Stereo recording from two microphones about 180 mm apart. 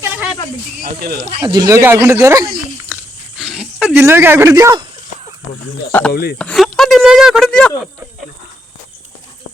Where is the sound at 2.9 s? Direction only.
10° right (ahead or behind).